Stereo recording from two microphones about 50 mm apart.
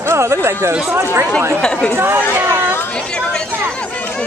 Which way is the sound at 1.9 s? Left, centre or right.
Right.